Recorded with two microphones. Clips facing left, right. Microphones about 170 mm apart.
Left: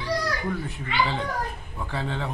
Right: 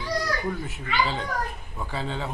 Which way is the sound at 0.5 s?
5° right (ahead or behind).